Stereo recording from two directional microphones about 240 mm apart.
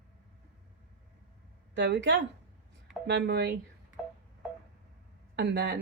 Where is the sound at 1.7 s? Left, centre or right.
Right.